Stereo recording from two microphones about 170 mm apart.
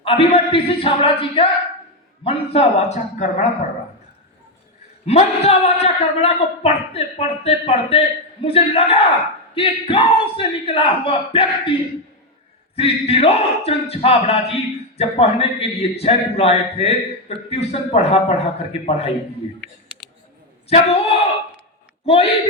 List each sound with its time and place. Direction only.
0.0 s a man's voice: 35° left (ahead or behind)
5.0 s a man's voice: 40° left (ahead or behind)
12.7 s a man's voice: 35° left (ahead or behind)
20.7 s a man's voice: 35° left (ahead or behind)
22.0 s speech: 35° left (ahead or behind)